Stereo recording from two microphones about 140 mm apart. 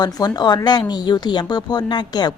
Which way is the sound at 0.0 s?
30° left (ahead or behind).